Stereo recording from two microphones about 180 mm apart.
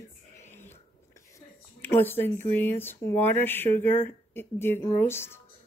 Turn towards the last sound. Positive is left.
turn(degrees=15)  # may be behind; listen again after turning